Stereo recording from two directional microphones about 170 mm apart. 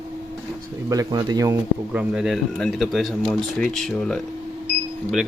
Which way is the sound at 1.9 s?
5° right (ahead or behind).